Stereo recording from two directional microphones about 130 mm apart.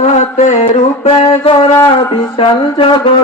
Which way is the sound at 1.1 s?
50° left (ahead or behind).